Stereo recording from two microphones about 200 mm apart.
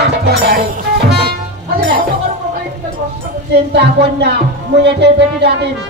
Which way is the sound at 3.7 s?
55° right (ahead or behind).